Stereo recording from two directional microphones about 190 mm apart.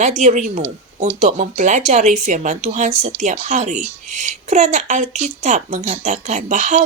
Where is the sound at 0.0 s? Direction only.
40° right (ahead or behind).